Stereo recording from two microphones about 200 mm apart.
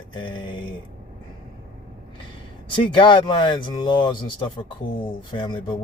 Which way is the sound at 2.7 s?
25° left (ahead or behind).